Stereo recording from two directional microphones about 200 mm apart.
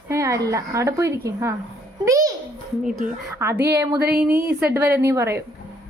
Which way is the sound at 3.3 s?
10° right (ahead or behind).